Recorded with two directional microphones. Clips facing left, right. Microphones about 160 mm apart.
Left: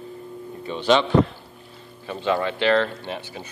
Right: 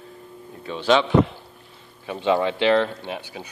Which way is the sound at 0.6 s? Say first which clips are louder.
Even; centre (ahead or behind).